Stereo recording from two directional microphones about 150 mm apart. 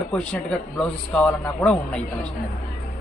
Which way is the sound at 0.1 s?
10° left (ahead or behind).